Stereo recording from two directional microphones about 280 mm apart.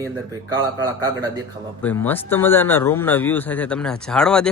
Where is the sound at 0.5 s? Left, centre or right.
Centre.